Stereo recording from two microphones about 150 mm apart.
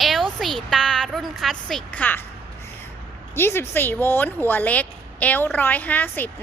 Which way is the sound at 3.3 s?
15° left (ahead or behind).